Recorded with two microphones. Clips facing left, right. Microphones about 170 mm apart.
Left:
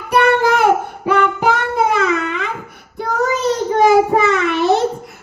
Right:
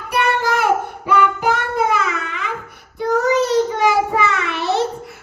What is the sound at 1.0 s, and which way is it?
Music, 70° left (ahead or behind).